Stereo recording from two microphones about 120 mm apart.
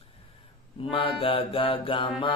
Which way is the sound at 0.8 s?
50° left (ahead or behind).